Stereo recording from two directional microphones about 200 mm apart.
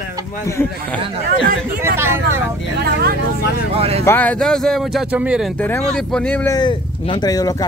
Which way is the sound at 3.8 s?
30° right (ahead or behind).